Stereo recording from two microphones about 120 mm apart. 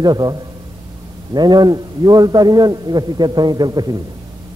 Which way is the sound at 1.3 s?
35° right (ahead or behind).